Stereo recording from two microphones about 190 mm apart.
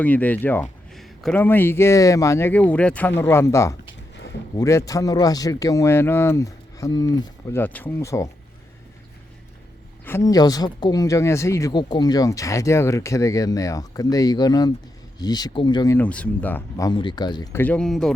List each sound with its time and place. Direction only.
0.0 s speech: 10° left (ahead or behind)
10.1 s speech: 15° left (ahead or behind)
16.0 s speech: 5° left (ahead or behind)